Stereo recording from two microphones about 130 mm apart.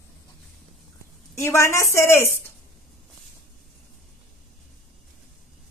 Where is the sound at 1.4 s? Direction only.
20° left (ahead or behind).